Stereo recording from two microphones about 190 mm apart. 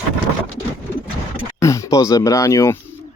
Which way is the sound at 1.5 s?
15° left (ahead or behind).